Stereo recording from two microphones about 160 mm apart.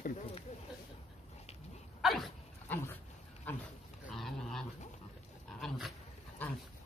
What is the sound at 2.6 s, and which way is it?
Speech, 10° left (ahead or behind).